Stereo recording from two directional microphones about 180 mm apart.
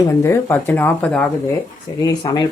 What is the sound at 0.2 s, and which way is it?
Speech, 15° left (ahead or behind).